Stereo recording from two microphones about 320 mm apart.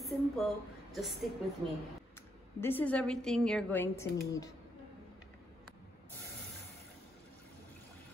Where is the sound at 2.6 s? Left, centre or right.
Centre.